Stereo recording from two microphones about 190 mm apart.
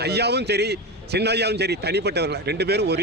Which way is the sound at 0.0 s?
60° right (ahead or behind).